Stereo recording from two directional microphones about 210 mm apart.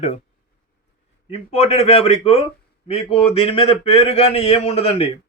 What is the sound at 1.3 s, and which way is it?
A man's voice, 30° left (ahead or behind).